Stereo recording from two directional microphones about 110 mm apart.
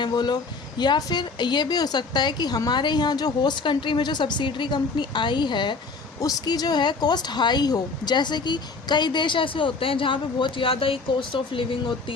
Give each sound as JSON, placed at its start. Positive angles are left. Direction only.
{"t": 0.0, "sound": "speech", "side_deg": 40}